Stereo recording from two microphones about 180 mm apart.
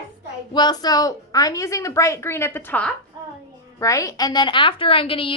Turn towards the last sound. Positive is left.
turn(degrees=30)  # may be behind; listen again after turning